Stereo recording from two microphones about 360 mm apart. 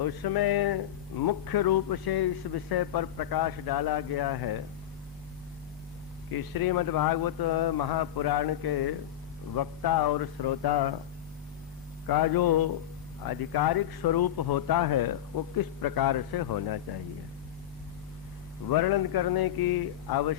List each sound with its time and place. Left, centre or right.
0.0 s speech: left
6.3 s speech: left
9.6 s speech: left
12.0 s speech: left
18.7 s speech: left